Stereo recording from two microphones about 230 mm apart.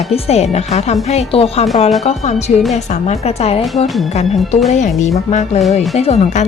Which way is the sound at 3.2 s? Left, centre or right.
Left.